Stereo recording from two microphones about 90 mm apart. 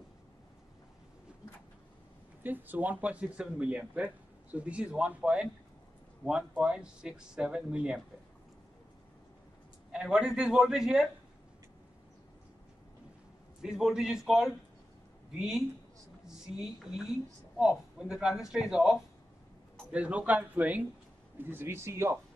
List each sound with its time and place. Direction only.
2.4 s speech: 20° right (ahead or behind)
9.9 s speech: 10° right (ahead or behind)
13.6 s a man's voice: 5° right (ahead or behind); by 22.2 s 30° right (ahead or behind)